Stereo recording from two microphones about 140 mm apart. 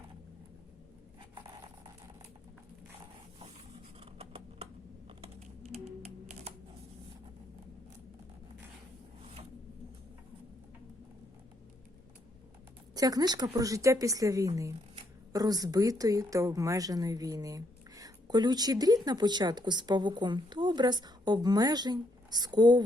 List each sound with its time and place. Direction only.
1.4 s a sound: 35° right (ahead or behind)
4.0 s typing: 45° right (ahead or behind)
12.9 s speech: 25° right (ahead or behind)